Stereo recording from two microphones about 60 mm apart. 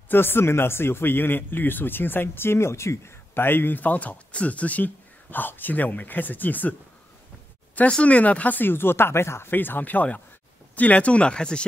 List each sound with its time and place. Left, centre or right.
0.1 s speech: left
7.9 s speech: left